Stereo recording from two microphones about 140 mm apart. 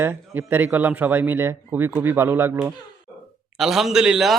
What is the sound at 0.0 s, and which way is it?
Speech, 15° right (ahead or behind).